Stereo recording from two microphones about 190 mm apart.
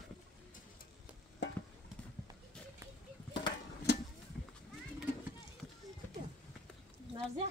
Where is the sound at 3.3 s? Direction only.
25° left (ahead or behind).